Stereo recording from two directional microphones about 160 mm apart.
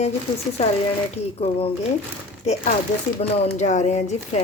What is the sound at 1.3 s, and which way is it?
Speech, 40° left (ahead or behind).